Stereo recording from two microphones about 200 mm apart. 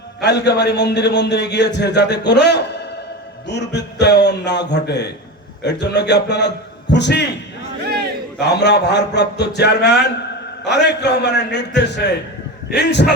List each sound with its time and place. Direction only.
0.2 s a man's voice: 55° left (ahead or behind)
8.4 s a man's voice: 55° left (ahead or behind)